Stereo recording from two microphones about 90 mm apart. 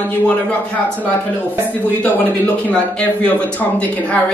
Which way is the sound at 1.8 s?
20° left (ahead or behind).